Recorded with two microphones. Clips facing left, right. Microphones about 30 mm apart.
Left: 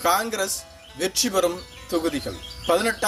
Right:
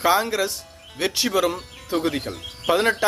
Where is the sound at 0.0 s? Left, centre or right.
Right.